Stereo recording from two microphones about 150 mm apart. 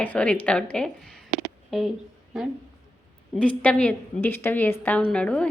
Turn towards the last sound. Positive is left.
turn(degrees=5)  # may be behind; listen again after turning